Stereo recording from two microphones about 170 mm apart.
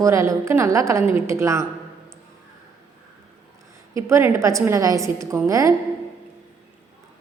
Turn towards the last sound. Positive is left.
turn(degrees=-20)  # may be behind; listen again after turning